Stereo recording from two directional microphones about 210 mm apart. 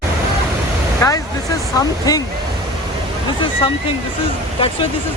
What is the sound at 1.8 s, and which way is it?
Speech, 20° left (ahead or behind).